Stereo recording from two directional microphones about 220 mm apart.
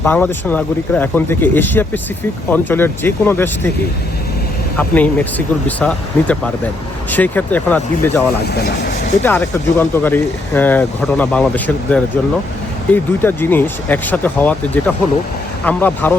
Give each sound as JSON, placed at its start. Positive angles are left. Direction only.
{"t": 0.0, "sound": "speech", "side_deg": 5}
{"t": 4.8, "sound": "speech", "side_deg": 5}
{"t": 8.5, "sound": "speech", "side_deg": 45}
{"t": 9.2, "sound": "speech", "side_deg": 10}